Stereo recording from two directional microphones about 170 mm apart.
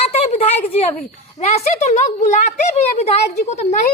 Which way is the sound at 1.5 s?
45° left (ahead or behind).